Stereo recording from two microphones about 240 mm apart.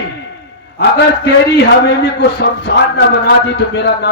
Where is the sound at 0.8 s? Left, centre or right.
Left.